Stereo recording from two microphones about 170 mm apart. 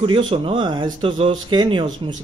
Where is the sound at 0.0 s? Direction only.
30° right (ahead or behind).